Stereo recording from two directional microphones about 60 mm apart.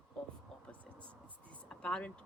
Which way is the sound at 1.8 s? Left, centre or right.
Centre.